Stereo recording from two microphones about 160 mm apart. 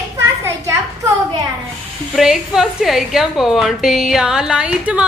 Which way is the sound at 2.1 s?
Centre (ahead or behind).